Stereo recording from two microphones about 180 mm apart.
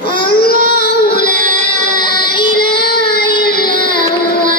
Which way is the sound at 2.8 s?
60° left (ahead or behind).